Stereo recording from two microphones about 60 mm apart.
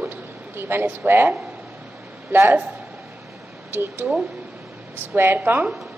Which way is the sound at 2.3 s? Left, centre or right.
Right.